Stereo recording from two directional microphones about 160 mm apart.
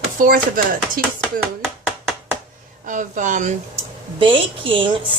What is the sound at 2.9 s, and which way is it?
Speech, 55° right (ahead or behind).